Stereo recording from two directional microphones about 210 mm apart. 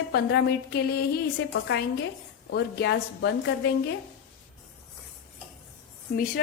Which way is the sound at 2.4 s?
55° left (ahead or behind).